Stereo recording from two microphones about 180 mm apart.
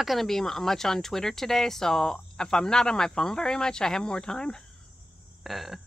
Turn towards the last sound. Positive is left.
turn(degrees=0)  # may be behind; listen again after turning